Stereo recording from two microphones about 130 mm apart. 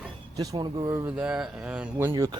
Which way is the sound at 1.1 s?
10° right (ahead or behind).